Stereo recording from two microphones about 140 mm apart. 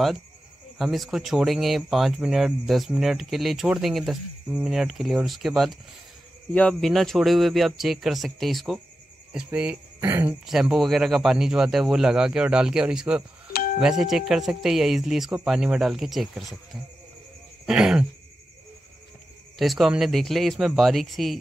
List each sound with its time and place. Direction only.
0.7 s speech: centre (ahead or behind); by 10.3 s 15° right (ahead or behind)
10.4 s speech: 5° right (ahead or behind)
13.5 s doorbell: 90° left
13.7 s speech: 5° right (ahead or behind)
17.6 s speech: 5° right (ahead or behind)
19.6 s speech: centre (ahead or behind)